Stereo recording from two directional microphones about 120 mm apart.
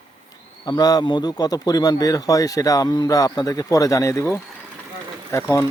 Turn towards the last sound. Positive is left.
turn(degrees=25)  # may be behind; listen again after turning